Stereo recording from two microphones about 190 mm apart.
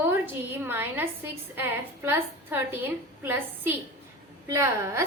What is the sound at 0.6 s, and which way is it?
A woman's voice, 10° right (ahead or behind).